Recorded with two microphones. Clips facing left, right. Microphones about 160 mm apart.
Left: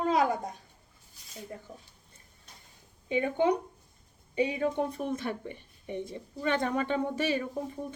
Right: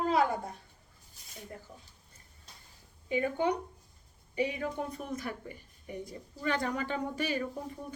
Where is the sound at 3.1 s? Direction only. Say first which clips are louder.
Left 3 dB; 25° left (ahead or behind).